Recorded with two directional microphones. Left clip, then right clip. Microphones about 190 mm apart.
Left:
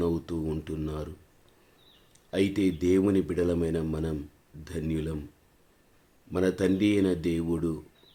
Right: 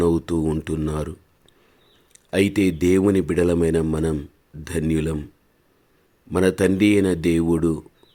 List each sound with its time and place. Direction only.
0.0 s speech: 45° right (ahead or behind)
2.1 s a man's voice: 45° right (ahead or behind)
6.3 s a man's voice: 45° right (ahead or behind)